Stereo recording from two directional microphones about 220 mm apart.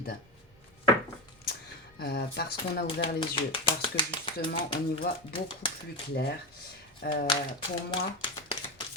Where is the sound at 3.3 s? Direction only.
25° left (ahead or behind).